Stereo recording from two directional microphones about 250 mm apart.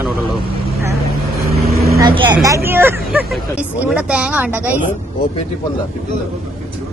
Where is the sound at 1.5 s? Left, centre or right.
Right.